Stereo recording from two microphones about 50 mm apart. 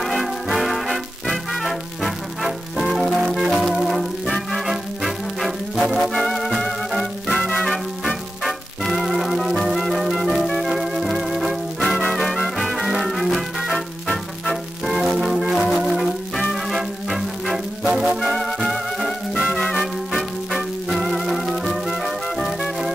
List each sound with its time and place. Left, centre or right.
0.0 s music: centre
7.3 s music: centre
8.5 s music: centre
19.4 s music: centre
19.7 s music: centre